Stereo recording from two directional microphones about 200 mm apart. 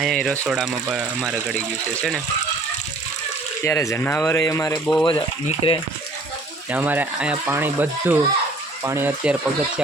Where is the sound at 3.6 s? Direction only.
15° left (ahead or behind).